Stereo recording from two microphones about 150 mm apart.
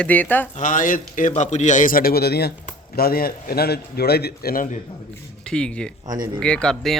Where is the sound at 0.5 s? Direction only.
60° left (ahead or behind).